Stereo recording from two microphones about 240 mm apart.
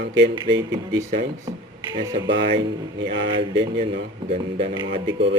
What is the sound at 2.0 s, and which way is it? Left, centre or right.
Speech, right.